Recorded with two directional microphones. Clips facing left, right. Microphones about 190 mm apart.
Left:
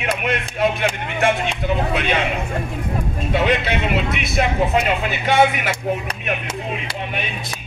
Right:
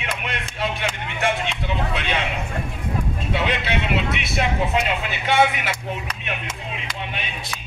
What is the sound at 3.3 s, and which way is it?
Speech, 45° left (ahead or behind).